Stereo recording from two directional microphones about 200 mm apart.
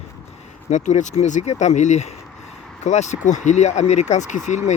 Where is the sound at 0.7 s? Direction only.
35° left (ahead or behind).